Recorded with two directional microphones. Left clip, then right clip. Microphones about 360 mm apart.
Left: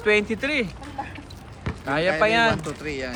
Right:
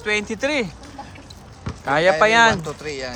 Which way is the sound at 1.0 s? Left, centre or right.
Left.